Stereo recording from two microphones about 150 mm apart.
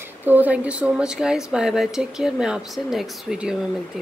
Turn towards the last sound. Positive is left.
turn(degrees=-5)  # may be behind; listen again after turning